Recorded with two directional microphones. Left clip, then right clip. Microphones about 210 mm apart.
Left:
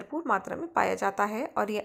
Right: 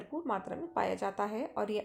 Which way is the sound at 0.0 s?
20° left (ahead or behind).